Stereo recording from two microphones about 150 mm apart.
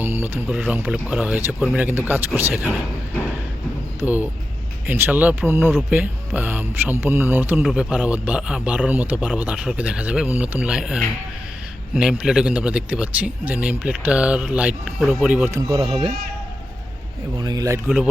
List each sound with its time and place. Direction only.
0.0 s speech: 10° right (ahead or behind)
4.0 s speech: 10° right (ahead or behind)
15.8 s speech: 35° right (ahead or behind)
17.3 s speech: 25° right (ahead or behind)
17.8 s speech: 5° right (ahead or behind)